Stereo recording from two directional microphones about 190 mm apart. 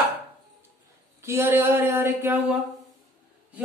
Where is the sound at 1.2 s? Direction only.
10° right (ahead or behind).